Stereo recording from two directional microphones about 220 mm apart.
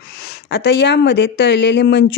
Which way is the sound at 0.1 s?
45° left (ahead or behind).